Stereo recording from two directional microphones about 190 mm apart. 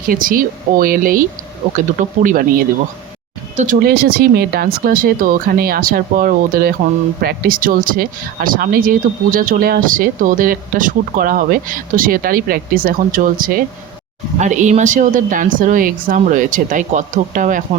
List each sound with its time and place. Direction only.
0.1 s speech: 45° right (ahead or behind)
3.8 s speech: 50° right (ahead or behind)